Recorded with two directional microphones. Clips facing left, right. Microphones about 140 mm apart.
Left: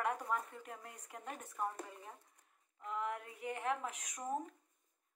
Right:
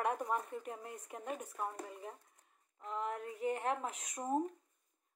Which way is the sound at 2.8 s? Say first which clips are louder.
Right 1 dB; 35° right (ahead or behind).